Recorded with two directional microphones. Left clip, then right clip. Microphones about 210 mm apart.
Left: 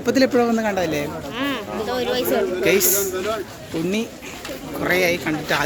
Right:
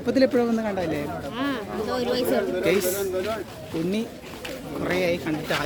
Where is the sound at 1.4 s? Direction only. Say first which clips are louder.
Left 4 dB; 15° right (ahead or behind).